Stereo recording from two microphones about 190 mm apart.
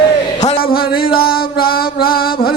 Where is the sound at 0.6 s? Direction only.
50° left (ahead or behind).